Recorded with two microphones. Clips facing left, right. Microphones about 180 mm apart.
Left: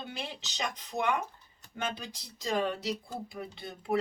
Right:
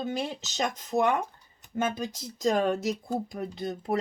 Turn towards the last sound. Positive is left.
turn(degrees=-40)  # may be behind; listen again after turning